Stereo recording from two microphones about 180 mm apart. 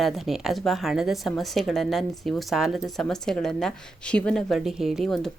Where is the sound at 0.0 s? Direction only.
Centre (ahead or behind).